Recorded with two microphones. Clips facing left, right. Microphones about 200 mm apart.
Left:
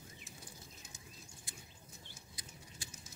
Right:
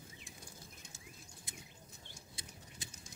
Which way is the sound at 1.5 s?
20° right (ahead or behind).